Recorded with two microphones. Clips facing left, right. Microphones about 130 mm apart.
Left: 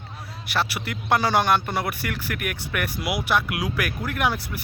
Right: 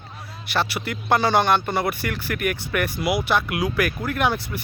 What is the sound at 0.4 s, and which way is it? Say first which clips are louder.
Speech: right 2 dB; 5° left (ahead or behind).